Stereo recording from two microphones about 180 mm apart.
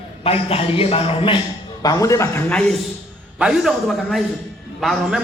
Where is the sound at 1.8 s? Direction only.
20° left (ahead or behind).